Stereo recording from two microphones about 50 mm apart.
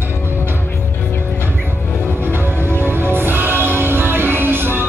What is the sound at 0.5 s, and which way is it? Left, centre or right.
Music, left.